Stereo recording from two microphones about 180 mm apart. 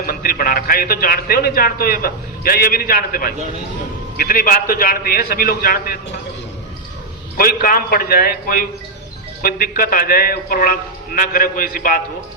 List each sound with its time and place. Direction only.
0.0 s a man's voice: 55° left (ahead or behind)
7.3 s a man's voice: 55° left (ahead or behind)